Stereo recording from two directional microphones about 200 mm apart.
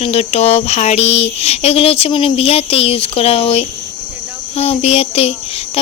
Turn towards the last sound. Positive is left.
turn(degrees=30)  # may be behind; listen again after turning